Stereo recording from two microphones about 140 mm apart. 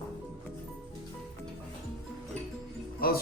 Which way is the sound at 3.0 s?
90° left.